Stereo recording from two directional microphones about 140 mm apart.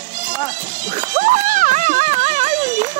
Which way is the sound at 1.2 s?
65° right (ahead or behind).